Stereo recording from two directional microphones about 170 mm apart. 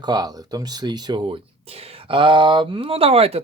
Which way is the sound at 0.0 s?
25° right (ahead or behind).